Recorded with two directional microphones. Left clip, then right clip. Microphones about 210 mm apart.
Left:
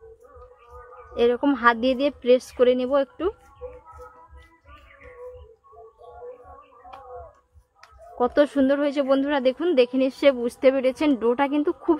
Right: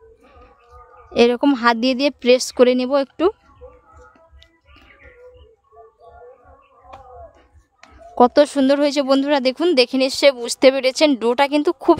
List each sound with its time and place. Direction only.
1.1 s speech: 60° right (ahead or behind)
8.2 s speech: 60° right (ahead or behind)